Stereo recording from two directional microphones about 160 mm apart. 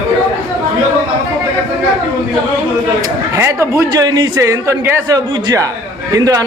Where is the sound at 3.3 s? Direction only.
15° right (ahead or behind).